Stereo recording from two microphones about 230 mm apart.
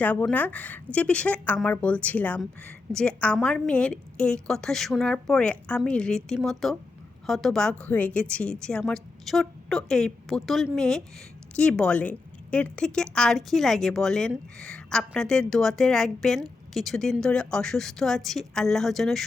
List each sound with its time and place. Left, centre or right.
0.0 s a woman's voice: centre